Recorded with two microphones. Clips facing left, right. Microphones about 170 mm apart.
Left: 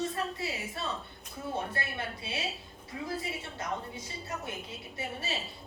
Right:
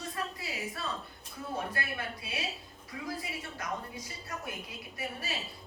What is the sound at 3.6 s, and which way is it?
A woman's voice, 25° left (ahead or behind).